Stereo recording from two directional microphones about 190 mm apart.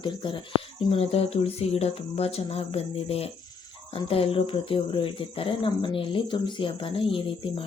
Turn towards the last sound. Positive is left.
turn(degrees=30)  # may be behind; listen again after turning